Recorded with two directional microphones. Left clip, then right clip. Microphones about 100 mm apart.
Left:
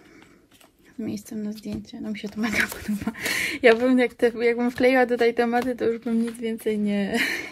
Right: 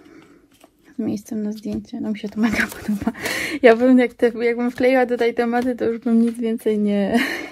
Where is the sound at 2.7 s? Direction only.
25° right (ahead or behind).